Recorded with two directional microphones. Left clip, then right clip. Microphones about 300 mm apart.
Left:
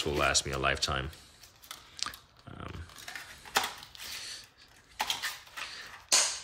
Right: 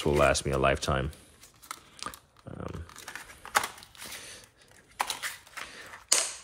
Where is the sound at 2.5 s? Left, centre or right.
Centre.